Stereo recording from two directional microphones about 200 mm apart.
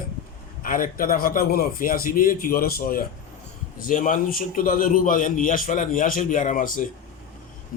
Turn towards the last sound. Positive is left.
turn(degrees=45)  # may be behind; listen again after turning